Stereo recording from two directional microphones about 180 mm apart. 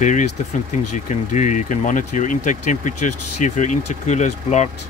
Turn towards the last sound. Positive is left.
turn(degrees=40)  # may be behind; listen again after turning